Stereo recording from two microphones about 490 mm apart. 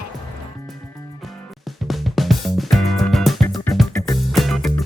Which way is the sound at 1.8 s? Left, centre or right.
Centre.